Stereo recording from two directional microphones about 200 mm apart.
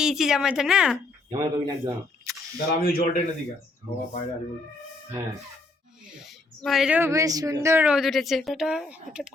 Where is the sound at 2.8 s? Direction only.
50° left (ahead or behind).